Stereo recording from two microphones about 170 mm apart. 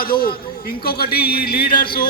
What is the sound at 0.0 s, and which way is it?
A man's voice, 60° left (ahead or behind).